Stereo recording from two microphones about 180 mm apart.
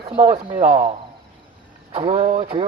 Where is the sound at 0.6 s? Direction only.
50° right (ahead or behind).